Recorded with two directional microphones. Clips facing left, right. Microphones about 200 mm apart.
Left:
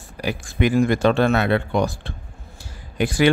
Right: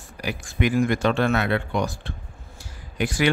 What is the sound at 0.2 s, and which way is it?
Speech, 30° left (ahead or behind).